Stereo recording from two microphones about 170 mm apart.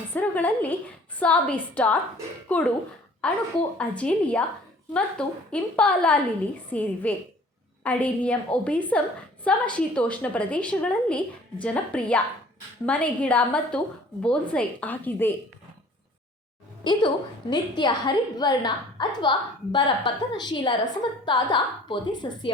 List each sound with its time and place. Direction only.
0.1 s a woman's voice: 10° left (ahead or behind)
16.8 s a woman's voice: 25° left (ahead or behind)